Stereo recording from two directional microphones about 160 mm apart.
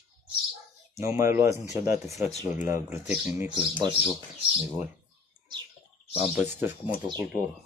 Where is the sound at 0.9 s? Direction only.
15° right (ahead or behind).